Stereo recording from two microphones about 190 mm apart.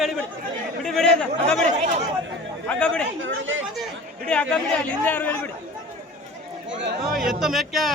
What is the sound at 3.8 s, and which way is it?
Chatter, 5° left (ahead or behind).